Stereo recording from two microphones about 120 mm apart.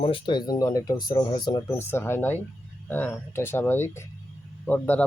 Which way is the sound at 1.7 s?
20° left (ahead or behind).